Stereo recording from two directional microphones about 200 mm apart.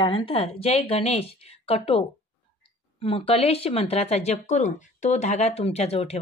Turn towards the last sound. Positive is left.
turn(degrees=30)  # may be behind; listen again after turning